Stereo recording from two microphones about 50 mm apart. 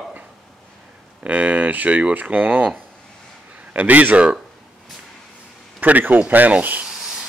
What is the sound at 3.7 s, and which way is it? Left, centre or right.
Speech, right.